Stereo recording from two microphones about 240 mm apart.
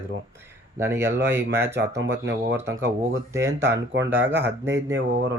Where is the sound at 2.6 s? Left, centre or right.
Centre.